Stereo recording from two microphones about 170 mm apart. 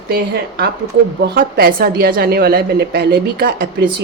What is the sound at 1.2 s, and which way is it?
A woman's voice, 70° right (ahead or behind).